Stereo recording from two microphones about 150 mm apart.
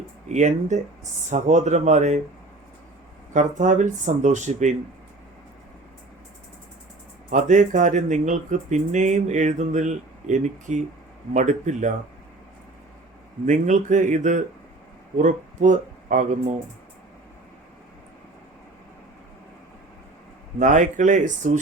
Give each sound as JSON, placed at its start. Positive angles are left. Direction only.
{"t": 0.3, "sound": "speech", "side_deg": -55}
{"t": 3.3, "sound": "speech", "side_deg": -55}
{"t": 7.3, "sound": "speech", "side_deg": -55}
{"t": 13.4, "sound": "speech", "side_deg": -55}
{"t": 20.6, "sound": "speech", "side_deg": -55}